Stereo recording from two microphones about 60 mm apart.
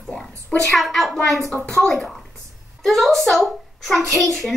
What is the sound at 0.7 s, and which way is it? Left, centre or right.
A child's voice, centre.